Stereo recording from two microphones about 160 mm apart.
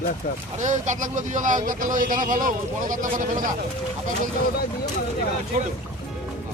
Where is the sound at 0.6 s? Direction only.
50° right (ahead or behind).